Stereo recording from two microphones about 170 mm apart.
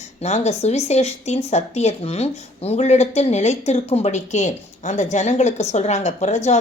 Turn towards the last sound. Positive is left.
turn(degrees=45)  # may be behind; listen again after turning